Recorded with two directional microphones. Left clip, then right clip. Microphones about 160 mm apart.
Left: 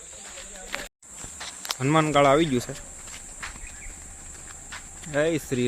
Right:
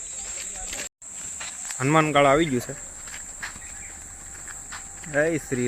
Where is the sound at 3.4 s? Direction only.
30° right (ahead or behind).